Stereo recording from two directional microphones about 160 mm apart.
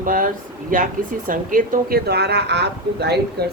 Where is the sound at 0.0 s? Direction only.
60° right (ahead or behind).